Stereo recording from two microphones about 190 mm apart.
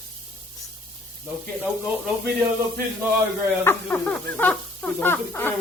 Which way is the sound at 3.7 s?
10° left (ahead or behind).